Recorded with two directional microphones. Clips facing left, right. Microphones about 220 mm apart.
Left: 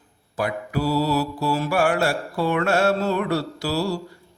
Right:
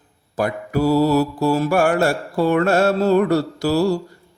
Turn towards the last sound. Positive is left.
turn(degrees=-45)  # may be behind; listen again after turning